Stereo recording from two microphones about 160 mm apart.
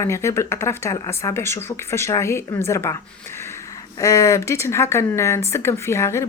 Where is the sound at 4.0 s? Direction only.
20° left (ahead or behind).